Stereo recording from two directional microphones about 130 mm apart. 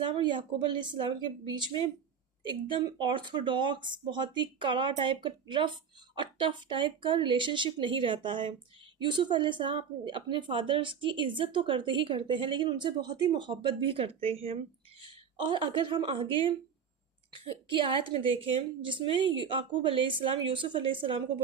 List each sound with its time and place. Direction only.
0.0 s a woman's voice: 40° right (ahead or behind)